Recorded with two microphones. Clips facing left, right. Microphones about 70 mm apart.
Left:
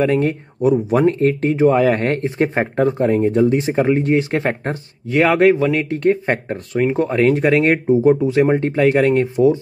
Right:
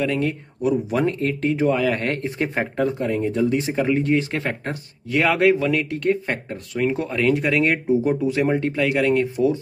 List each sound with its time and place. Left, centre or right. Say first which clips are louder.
0.0 s speech: left 6 dB; left